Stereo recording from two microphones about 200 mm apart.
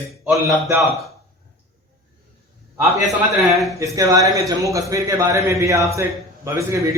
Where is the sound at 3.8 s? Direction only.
15° right (ahead or behind).